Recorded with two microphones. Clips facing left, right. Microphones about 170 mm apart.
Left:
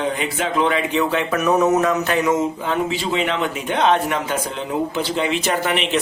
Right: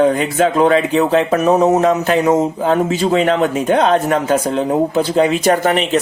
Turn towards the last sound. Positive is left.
turn(degrees=-45)  # may be behind; listen again after turning